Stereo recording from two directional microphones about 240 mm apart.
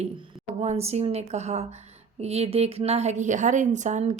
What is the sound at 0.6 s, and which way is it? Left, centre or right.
A woman's voice, right.